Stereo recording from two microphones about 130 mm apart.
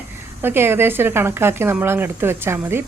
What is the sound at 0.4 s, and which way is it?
Speech, 15° right (ahead or behind).